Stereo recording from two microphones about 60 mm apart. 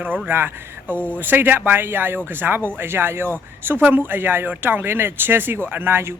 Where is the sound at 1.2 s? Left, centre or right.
Right.